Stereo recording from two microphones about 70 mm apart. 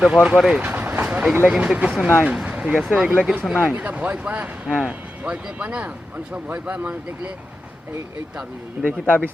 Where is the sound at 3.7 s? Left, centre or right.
Right.